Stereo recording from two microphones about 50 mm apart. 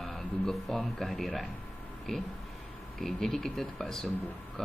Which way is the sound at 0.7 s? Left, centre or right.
Centre.